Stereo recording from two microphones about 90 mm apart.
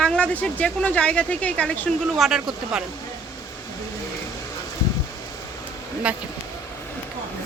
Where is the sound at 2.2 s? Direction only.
5° right (ahead or behind).